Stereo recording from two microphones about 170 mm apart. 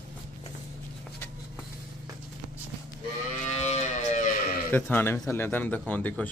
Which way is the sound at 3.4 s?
40° left (ahead or behind).